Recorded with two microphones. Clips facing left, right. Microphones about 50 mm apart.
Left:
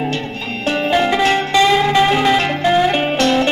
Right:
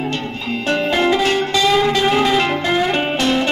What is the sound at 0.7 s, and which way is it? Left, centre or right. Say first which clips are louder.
Music: left 1 dB; centre.